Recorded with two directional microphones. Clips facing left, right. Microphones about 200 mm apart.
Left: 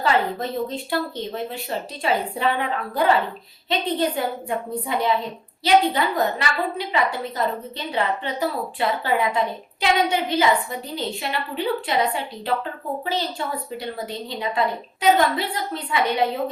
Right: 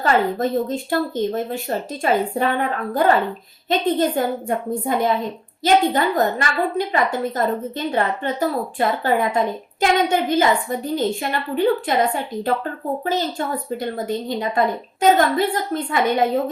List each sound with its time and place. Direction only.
0.0 s a woman's voice: 45° right (ahead or behind)